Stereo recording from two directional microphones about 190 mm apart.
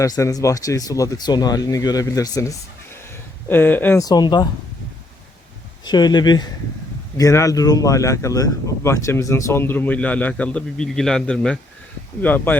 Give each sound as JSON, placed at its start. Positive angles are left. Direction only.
{"t": 0.0, "sound": "speech", "side_deg": 15}
{"t": 5.8, "sound": "speech", "side_deg": 20}